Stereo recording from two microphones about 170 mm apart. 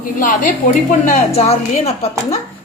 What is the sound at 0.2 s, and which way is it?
A woman's voice, 50° left (ahead or behind).